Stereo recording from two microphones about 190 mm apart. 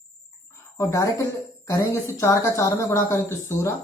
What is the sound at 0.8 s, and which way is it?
Speech, 15° left (ahead or behind).